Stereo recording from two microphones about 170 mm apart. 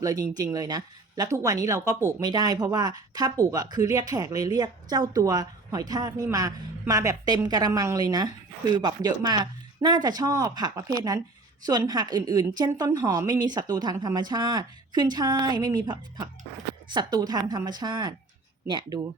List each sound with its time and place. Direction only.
0.0 s a woman's voice: 20° right (ahead or behind)